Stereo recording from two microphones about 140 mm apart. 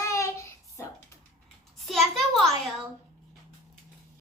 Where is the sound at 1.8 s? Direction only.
Centre (ahead or behind).